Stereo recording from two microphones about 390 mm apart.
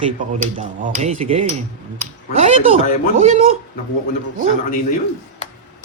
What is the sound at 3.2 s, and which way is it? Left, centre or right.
Speech, centre.